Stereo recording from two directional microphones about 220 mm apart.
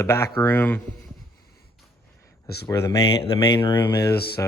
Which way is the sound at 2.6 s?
15° left (ahead or behind).